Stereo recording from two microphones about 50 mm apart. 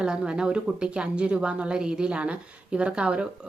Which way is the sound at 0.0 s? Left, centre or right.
Centre.